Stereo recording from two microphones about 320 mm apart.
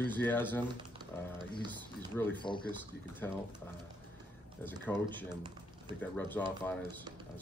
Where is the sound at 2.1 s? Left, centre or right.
Centre.